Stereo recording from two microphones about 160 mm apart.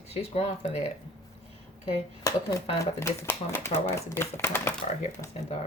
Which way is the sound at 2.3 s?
20° left (ahead or behind).